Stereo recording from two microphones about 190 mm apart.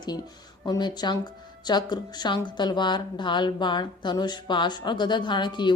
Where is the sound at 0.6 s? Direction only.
20° left (ahead or behind).